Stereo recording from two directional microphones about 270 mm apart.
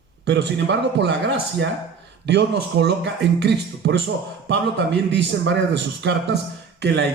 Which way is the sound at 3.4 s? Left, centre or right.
Right.